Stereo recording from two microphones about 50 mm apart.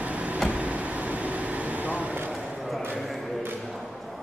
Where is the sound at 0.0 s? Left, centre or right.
Right.